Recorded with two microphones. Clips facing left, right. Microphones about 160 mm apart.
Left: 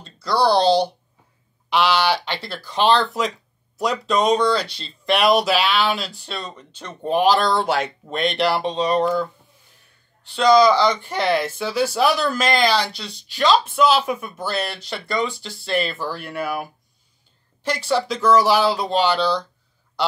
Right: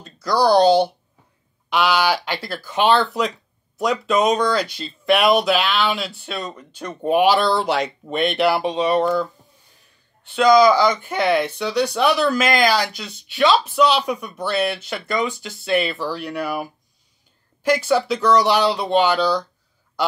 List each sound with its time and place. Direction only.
0.3 s speech: 30° left (ahead or behind)
0.6 s speech: 10° right (ahead or behind)
10.3 s speech: 10° right (ahead or behind)
15.2 s speech: 30° left (ahead or behind)
15.6 s speech: centre (ahead or behind)
17.8 s speech: 5° right (ahead or behind)